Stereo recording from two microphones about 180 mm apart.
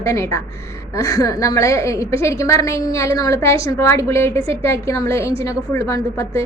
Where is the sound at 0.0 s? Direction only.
15° left (ahead or behind).